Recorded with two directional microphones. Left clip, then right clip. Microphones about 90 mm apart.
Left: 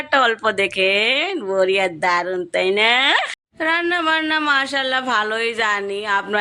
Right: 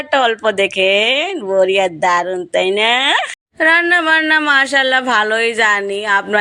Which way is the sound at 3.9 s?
55° right (ahead or behind).